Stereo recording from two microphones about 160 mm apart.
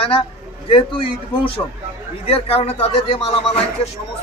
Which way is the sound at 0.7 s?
35° left (ahead or behind).